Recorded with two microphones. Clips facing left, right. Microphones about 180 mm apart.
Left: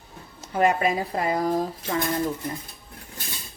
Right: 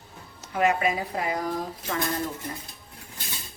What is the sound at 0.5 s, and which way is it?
Speech, 35° left (ahead or behind).